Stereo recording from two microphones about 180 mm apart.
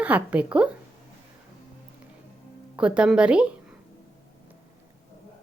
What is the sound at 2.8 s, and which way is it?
Speech, 5° right (ahead or behind).